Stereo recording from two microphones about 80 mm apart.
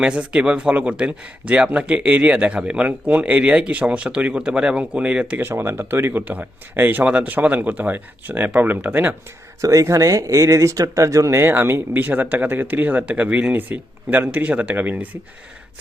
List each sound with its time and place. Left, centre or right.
0.0 s speech: centre
5.4 s speech: right
9.6 s speech: right; by 15.2 s centre